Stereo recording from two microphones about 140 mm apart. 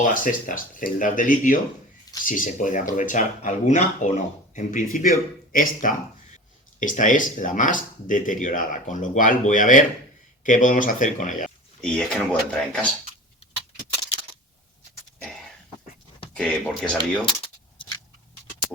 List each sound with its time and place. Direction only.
0.0 s speech: 70° left (ahead or behind)
11.8 s speech: 5° left (ahead or behind)
16.3 s speech: 5° left (ahead or behind)